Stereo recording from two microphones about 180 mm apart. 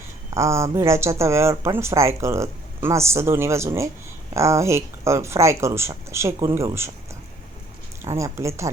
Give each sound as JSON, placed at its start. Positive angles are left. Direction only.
{"t": 0.3, "sound": "speech", "side_deg": -15}
{"t": 8.0, "sound": "speech", "side_deg": -15}